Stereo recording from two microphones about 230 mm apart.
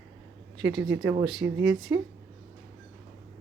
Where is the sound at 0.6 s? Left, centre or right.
Right.